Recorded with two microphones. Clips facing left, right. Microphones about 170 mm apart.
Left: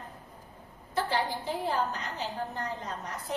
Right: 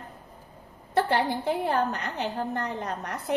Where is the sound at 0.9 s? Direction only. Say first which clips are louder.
Right 6 dB; 60° right (ahead or behind).